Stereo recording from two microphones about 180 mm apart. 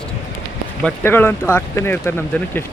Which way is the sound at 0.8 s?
10° left (ahead or behind).